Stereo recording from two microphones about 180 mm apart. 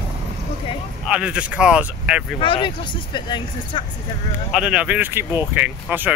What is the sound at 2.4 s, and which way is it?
Speech, 25° left (ahead or behind).